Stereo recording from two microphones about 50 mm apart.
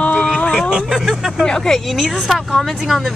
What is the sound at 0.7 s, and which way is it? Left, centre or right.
Speech, centre.